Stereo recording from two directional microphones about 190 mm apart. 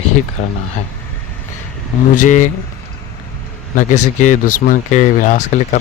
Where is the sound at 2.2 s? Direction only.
40° left (ahead or behind).